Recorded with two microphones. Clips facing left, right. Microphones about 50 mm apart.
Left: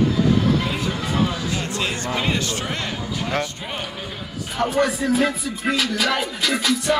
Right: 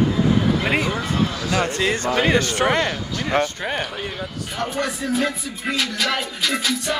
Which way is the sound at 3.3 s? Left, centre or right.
Right.